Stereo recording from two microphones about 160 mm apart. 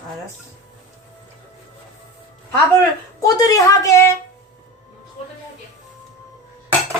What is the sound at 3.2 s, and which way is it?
Speech, 20° left (ahead or behind).